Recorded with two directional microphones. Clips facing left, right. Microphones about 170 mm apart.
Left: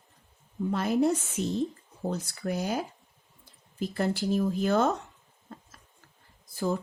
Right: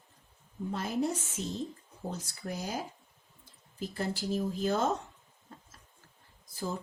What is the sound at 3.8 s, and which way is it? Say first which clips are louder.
Speech: left 6 dB; 65° left (ahead or behind).